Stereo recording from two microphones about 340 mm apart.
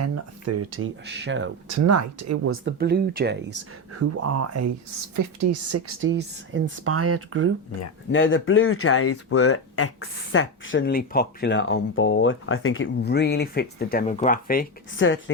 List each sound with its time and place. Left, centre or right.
0.0 s speech: right
1.9 s speech: right
2.6 s speech: right
4.3 s speech: right
8.1 s speech: left